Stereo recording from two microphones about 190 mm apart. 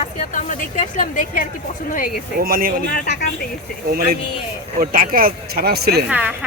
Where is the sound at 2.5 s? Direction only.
50° right (ahead or behind).